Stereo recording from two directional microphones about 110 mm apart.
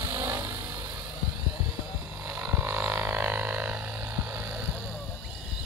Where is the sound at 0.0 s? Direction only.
25° right (ahead or behind).